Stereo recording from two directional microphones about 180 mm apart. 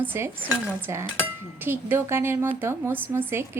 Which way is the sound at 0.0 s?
10° right (ahead or behind).